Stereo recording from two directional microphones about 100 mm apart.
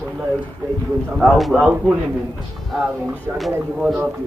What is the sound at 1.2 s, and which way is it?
Speech, centre (ahead or behind).